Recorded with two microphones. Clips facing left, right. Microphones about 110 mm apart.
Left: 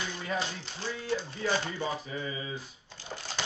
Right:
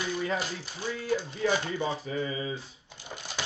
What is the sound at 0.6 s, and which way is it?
Speech, 10° right (ahead or behind).